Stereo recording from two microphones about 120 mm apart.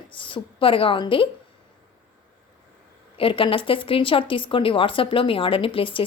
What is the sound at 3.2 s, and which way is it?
Speech, 45° left (ahead or behind).